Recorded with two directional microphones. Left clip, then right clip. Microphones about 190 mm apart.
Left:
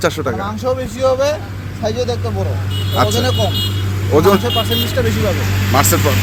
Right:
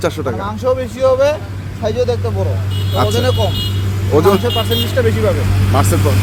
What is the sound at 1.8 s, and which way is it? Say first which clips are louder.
Speech: right 3 dB; 40° right (ahead or behind).